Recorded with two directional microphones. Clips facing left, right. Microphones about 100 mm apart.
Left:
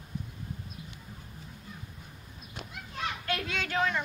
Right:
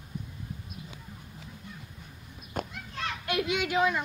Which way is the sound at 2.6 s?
50° right (ahead or behind).